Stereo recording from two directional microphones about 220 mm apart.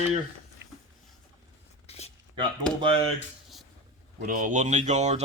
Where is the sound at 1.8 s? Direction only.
30° left (ahead or behind).